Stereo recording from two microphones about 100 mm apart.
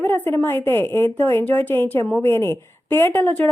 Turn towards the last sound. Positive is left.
turn(degrees=20)  # may be behind; listen again after turning